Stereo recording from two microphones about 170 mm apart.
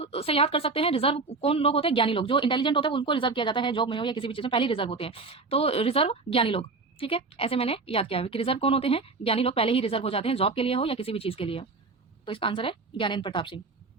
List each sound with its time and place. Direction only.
0.0 s a woman's voice: 35° left (ahead or behind)